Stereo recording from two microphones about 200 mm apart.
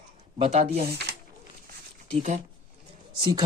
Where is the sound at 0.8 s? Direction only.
55° right (ahead or behind).